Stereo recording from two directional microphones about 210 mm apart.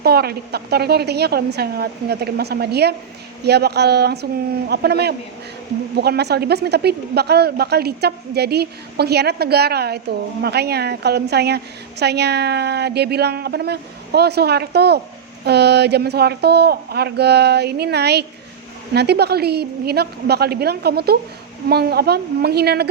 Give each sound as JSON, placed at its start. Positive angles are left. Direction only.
{"t": 0.0, "sound": "a woman's voice", "side_deg": -50}